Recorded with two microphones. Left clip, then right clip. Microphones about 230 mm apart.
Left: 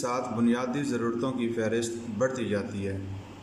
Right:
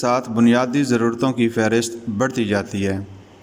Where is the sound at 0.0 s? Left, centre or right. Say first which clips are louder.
Right 10 dB; right.